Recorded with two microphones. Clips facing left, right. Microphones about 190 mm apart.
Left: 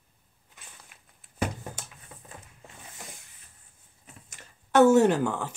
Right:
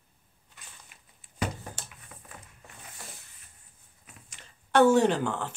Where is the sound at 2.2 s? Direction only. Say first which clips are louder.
Left 3 dB; 25° left (ahead or behind).